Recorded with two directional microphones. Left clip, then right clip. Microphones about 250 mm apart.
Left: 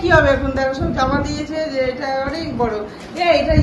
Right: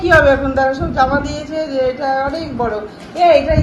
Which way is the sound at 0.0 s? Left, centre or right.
Centre.